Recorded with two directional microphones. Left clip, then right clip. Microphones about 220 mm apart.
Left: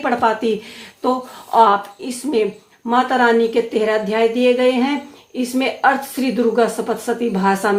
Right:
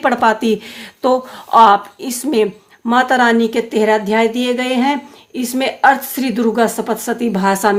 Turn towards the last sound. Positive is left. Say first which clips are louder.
# right 3 dB
turn(degrees=-40)  # may be behind; listen again after turning